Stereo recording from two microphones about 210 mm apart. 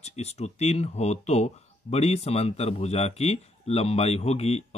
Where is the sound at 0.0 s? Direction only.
30° left (ahead or behind).